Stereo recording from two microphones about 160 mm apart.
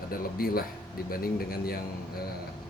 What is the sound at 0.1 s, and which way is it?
Speech, 70° left (ahead or behind).